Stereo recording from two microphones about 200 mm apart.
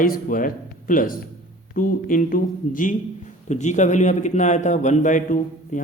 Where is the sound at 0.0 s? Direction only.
45° left (ahead or behind).